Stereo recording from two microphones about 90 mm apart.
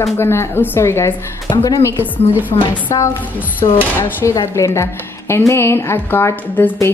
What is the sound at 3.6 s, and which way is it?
Speech, 65° left (ahead or behind).